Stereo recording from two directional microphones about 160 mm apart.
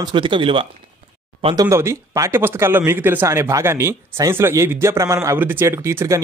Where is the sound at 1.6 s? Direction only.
15° right (ahead or behind).